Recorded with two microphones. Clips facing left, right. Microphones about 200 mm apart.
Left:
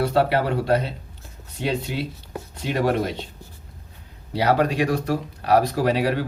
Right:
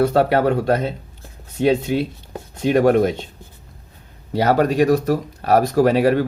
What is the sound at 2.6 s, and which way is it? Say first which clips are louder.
Speech: right 8 dB; 50° right (ahead or behind).